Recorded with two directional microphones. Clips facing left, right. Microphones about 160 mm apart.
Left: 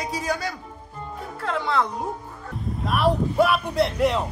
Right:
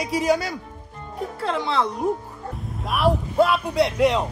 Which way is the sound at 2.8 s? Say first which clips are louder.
Even; centre (ahead or behind).